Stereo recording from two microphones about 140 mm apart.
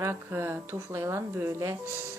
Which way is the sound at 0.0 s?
20° right (ahead or behind).